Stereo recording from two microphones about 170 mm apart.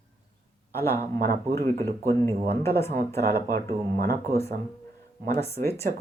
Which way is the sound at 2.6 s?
15° left (ahead or behind).